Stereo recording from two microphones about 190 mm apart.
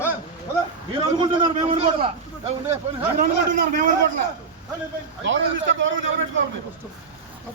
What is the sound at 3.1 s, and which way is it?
Speech, 45° right (ahead or behind).